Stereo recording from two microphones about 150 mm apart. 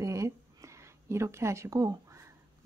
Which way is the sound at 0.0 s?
20° right (ahead or behind).